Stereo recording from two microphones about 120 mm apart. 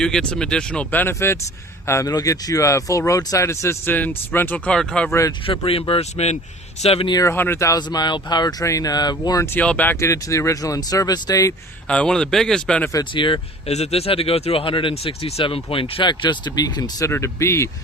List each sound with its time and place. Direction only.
0.0 s speech: 5° left (ahead or behind)
5.5 s speech: 50° left (ahead or behind)
7.1 s speech: 30° left (ahead or behind)
7.3 s speech: 20° left (ahead or behind); by 9.4 s 35° left (ahead or behind)
9.4 s speech: 15° left (ahead or behind); by 11.5 s 35° left (ahead or behind)
11.9 s speech: 10° left (ahead or behind)
13.1 s speech: 45° left (ahead or behind)
13.7 s speech: 60° left (ahead or behind); by 17.1 s 35° left (ahead or behind)
17.1 s speech: 25° left (ahead or behind)